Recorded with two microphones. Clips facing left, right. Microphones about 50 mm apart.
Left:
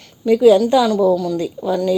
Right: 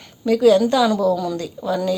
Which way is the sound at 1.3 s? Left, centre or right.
Centre.